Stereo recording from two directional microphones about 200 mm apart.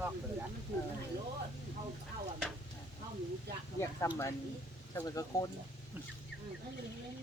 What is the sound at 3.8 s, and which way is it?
Speech, 15° left (ahead or behind).